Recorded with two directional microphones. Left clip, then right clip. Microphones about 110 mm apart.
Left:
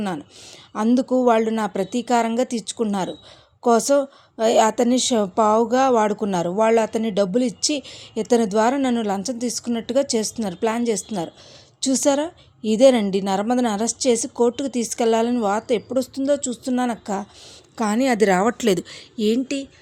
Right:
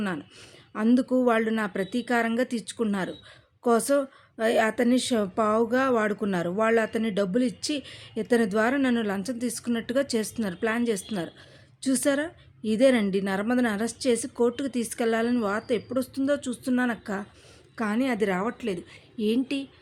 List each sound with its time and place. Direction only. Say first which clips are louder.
0.9 s a woman's voice: left 6 dB; 20° left (ahead or behind)
17.7 s a woman's voice: left 8 dB; 45° left (ahead or behind); by 19.0 s 65° left (ahead or behind)
19.1 s speech: left 5 dB; 40° left (ahead or behind)